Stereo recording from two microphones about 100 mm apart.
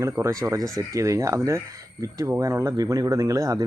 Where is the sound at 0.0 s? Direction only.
30° right (ahead or behind).